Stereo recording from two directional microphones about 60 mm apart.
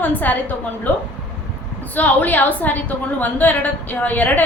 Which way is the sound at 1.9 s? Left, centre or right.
Left.